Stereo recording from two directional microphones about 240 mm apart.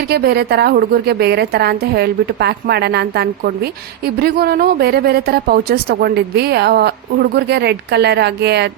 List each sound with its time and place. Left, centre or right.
0.1 s a woman's voice: right